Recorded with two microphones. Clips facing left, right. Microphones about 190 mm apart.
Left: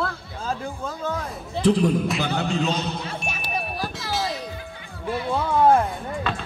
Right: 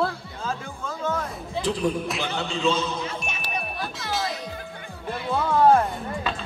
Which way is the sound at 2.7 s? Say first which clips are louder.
Right 1 dB; 60° left (ahead or behind).